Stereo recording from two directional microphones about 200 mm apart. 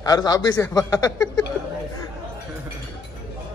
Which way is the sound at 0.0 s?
20° left (ahead or behind).